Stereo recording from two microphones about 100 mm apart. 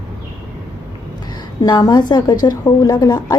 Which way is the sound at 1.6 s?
45° left (ahead or behind).